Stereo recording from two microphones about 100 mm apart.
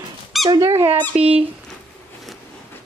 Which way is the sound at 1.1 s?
90° right.